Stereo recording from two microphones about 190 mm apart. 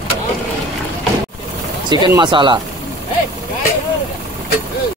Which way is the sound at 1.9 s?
25° right (ahead or behind).